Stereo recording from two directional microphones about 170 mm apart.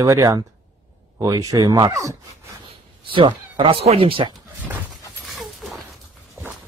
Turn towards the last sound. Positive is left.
turn(degrees=0)  # may be behind; listen again after turning